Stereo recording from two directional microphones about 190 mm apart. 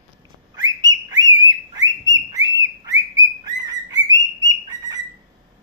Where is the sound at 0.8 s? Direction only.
20° right (ahead or behind).